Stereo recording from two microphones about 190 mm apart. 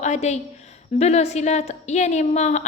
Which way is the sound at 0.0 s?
35° left (ahead or behind).